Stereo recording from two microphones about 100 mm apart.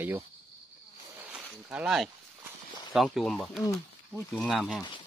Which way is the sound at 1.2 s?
15° right (ahead or behind).